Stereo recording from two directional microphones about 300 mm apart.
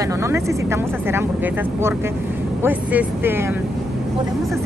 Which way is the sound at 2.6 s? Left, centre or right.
Centre.